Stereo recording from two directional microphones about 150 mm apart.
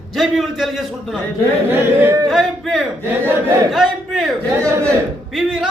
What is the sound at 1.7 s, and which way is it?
Speech, 15° right (ahead or behind).